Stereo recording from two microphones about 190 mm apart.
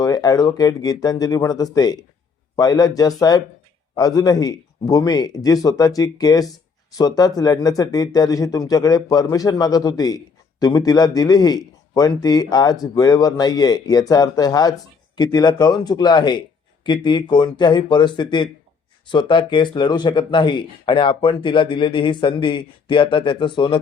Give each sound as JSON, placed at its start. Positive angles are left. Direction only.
{"t": 0.0, "sound": "a man's voice", "side_deg": 20}